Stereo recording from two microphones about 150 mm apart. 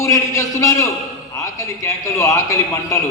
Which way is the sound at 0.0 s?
20° left (ahead or behind).